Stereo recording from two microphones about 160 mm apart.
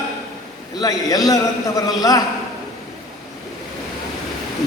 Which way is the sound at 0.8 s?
25° left (ahead or behind).